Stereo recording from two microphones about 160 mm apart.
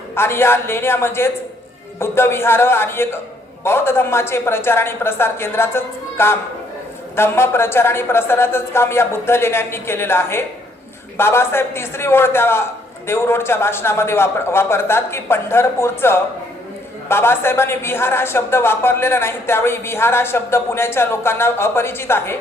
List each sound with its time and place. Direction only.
0.1 s a woman's voice: 15° left (ahead or behind)